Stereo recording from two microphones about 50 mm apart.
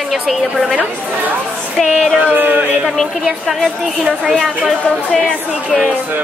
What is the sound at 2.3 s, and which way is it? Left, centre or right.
Speech, right.